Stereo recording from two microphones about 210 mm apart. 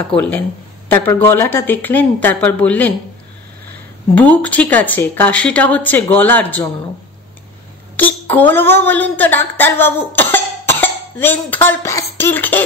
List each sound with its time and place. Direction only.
0.1 s speech: 10° left (ahead or behind)
4.1 s speech: 5° left (ahead or behind)
7.9 s a woman's voice: 10° left (ahead or behind)